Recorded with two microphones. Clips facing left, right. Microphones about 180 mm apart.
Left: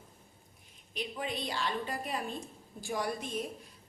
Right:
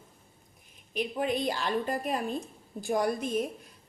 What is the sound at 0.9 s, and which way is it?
A woman's voice, 50° right (ahead or behind).